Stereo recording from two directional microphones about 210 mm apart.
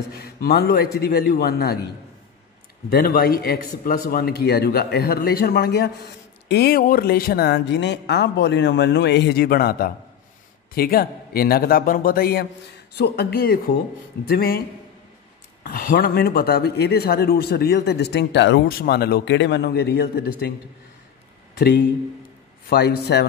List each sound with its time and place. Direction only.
0.1 s speech: 45° left (ahead or behind)
2.9 s speech: 45° left (ahead or behind)
15.6 s speech: 45° left (ahead or behind)
21.5 s speech: 50° left (ahead or behind)